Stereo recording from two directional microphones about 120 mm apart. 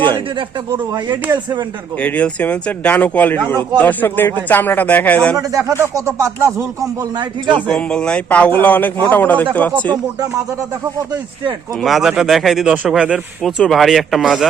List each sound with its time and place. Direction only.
0.0 s speech: 45° right (ahead or behind)
2.0 s a man's voice: 10° left (ahead or behind)
5.4 s speech: 30° right (ahead or behind)
7.7 s a man's voice: 5° left (ahead or behind)
11.8 s speech: centre (ahead or behind)